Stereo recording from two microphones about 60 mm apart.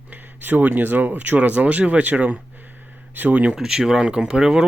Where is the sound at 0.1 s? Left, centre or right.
Right.